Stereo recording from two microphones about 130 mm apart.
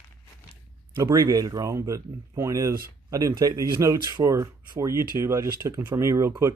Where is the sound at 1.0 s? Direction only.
25° right (ahead or behind).